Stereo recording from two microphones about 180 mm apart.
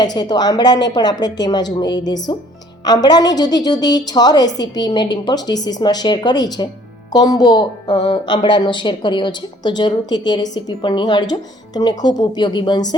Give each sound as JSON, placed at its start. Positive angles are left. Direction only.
{"t": 0.0, "sound": "speech", "side_deg": 20}